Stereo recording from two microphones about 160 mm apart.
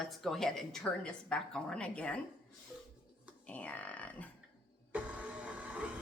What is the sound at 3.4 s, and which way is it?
Speech, 10° left (ahead or behind).